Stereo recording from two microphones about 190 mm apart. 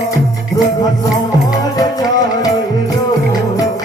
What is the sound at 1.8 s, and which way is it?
Music, 20° left (ahead or behind).